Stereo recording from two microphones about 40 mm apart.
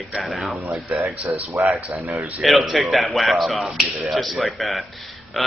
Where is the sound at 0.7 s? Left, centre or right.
Right.